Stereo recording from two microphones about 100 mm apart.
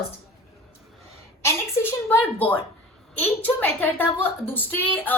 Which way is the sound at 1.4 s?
25° left (ahead or behind).